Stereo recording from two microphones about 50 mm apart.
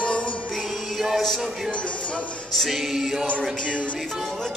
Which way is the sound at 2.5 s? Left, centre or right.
Centre.